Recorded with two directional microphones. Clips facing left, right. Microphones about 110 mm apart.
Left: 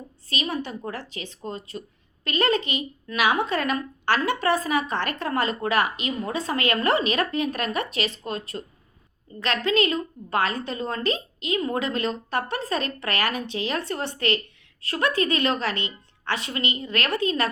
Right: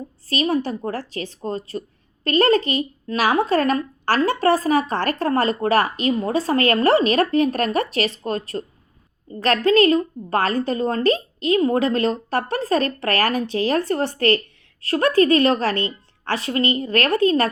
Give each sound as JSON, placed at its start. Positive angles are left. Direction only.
{"t": 0.3, "sound": "a woman's voice", "side_deg": -40}
{"t": 9.6, "sound": "a woman's voice", "side_deg": -40}